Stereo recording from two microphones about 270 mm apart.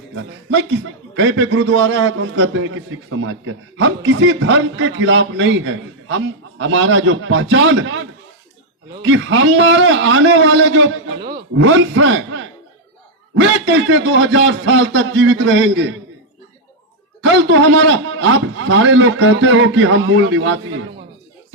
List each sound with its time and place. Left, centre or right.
1.2 s a man's voice: right
13.4 s a man's voice: right
17.3 s a man's voice: right